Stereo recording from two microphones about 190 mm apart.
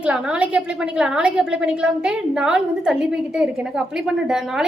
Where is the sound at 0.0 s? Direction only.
5° right (ahead or behind).